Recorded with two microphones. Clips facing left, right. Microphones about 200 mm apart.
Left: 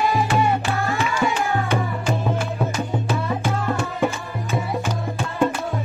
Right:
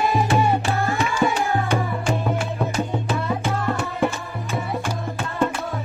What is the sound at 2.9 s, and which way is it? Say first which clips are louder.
Music: even; centre (ahead or behind).